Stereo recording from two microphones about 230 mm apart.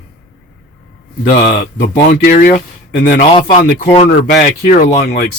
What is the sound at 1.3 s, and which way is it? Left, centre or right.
A man's voice, left.